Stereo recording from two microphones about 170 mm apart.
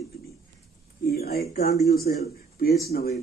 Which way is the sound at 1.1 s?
65° left (ahead or behind).